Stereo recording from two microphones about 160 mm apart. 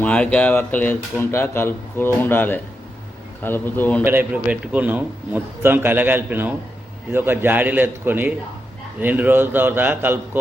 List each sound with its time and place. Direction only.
0.0 s speech: 5° left (ahead or behind)
4.0 s a man's voice: 10° right (ahead or behind)